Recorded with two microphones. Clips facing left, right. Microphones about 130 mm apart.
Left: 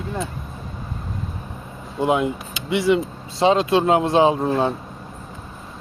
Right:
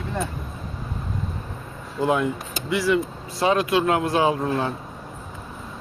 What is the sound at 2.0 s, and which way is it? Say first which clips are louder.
Speech: left 2 dB; 20° left (ahead or behind).